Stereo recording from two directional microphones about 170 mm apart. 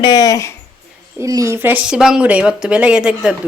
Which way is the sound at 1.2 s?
20° right (ahead or behind).